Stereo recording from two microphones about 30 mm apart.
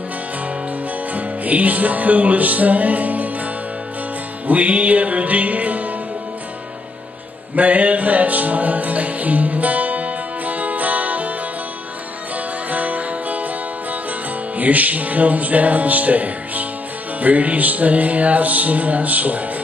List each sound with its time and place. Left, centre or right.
1.1 s music: right
4.5 s music: right
7.5 s music: right
12.6 s music: right
14.6 s music: right